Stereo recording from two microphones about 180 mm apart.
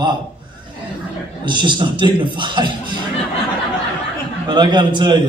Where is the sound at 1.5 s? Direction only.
25° right (ahead or behind).